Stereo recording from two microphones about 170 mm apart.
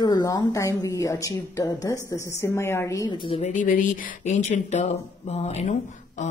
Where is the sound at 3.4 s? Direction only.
50° left (ahead or behind).